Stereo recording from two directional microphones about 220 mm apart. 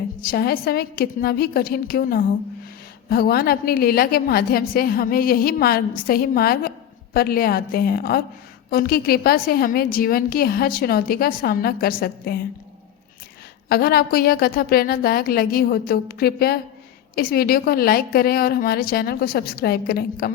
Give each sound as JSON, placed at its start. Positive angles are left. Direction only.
{"t": 0.2, "sound": "a woman's voice", "side_deg": 45}
{"t": 13.7, "sound": "a woman's voice", "side_deg": 45}